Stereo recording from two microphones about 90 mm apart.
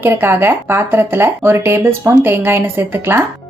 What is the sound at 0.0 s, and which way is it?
A woman's voice, 25° right (ahead or behind).